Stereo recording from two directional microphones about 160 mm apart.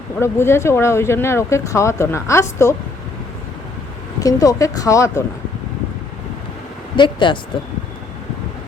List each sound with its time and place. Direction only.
0.2 s speech: 15° left (ahead or behind)
4.2 s speech: 20° left (ahead or behind)
6.9 s speech: 30° left (ahead or behind)